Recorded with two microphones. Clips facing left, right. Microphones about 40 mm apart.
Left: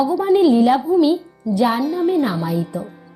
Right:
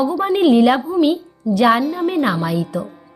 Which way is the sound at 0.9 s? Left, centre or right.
Right.